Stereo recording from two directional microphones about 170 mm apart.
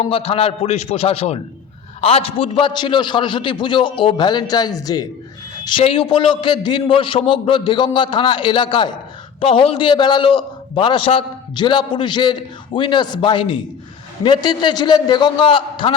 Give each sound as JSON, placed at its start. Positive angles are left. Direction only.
{"t": 0.0, "sound": "a man's voice", "side_deg": 35}
{"t": 5.6, "sound": "a man's voice", "side_deg": 30}